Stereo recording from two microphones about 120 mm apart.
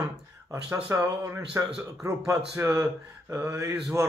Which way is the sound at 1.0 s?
25° right (ahead or behind).